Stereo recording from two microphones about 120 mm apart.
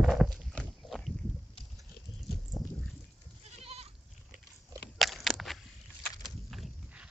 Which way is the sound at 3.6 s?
55° right (ahead or behind).